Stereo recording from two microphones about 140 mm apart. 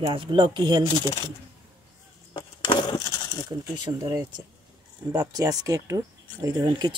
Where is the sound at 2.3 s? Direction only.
35° left (ahead or behind).